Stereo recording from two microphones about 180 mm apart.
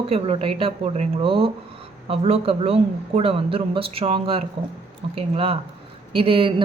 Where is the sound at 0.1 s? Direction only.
30° right (ahead or behind).